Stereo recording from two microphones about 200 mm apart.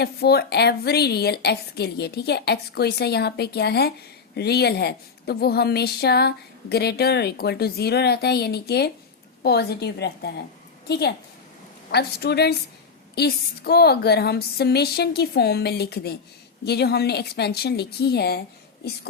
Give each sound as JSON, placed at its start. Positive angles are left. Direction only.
{"t": 0.0, "sound": "a woman's voice", "side_deg": 55}